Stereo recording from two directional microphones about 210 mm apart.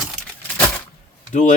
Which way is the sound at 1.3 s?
35° left (ahead or behind).